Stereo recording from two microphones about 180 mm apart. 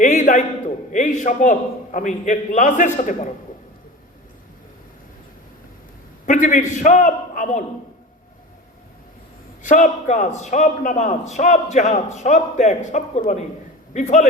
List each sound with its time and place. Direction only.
0.0 s a man's voice: 40° left (ahead or behind)
6.2 s a man's voice: 45° left (ahead or behind)
9.6 s a man's voice: 45° left (ahead or behind)